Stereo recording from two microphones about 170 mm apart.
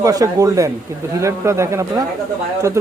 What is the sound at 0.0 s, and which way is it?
Speech, 20° right (ahead or behind).